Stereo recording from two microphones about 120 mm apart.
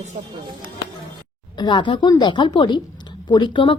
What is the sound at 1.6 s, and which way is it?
Speech, 40° left (ahead or behind).